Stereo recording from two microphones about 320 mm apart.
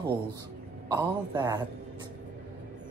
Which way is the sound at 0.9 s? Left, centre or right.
Centre.